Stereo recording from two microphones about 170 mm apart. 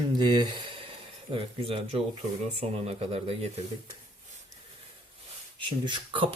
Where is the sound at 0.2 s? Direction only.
25° right (ahead or behind).